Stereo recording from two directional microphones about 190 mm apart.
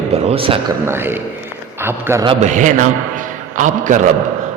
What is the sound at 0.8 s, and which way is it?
A man's voice, 10° right (ahead or behind).